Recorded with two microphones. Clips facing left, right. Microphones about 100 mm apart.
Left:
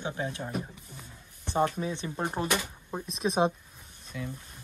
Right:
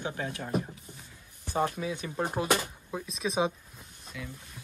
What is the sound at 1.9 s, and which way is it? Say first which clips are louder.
Speech: even; 25° left (ahead or behind).